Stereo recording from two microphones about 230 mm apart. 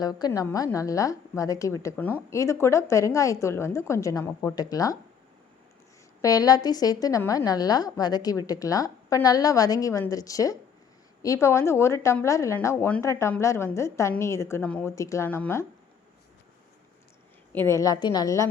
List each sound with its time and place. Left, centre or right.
0.0 s speech: centre
6.2 s speech: centre
17.7 s speech: centre